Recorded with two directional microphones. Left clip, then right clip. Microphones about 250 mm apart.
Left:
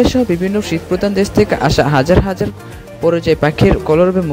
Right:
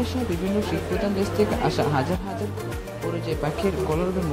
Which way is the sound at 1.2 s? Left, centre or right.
Left.